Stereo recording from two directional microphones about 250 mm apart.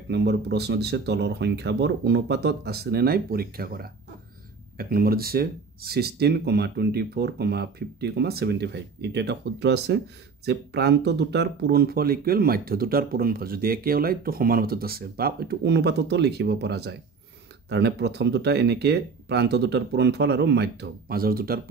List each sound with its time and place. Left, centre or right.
0.1 s speech: right